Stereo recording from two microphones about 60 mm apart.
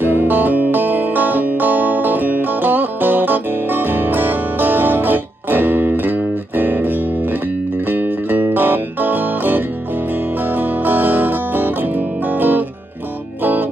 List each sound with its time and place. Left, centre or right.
0.0 s music: right